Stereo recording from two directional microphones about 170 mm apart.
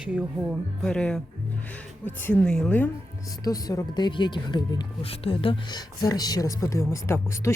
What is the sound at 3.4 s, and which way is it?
Speech, 20° left (ahead or behind).